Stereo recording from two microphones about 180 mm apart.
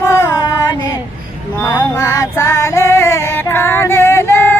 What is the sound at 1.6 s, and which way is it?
Music, 20° left (ahead or behind).